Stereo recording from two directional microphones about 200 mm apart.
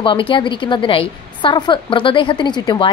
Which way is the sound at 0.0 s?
25° left (ahead or behind).